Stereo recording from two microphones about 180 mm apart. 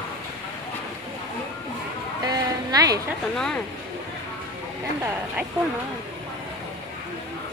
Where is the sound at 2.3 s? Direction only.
20° right (ahead or behind).